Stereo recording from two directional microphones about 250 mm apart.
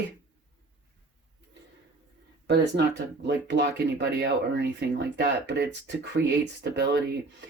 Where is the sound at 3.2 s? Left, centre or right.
Right.